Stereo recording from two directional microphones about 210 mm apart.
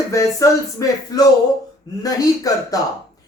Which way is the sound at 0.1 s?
15° left (ahead or behind).